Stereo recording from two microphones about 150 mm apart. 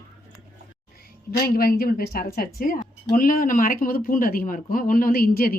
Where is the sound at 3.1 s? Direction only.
65° left (ahead or behind).